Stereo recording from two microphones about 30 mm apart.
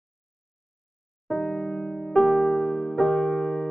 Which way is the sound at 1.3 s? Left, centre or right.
Centre.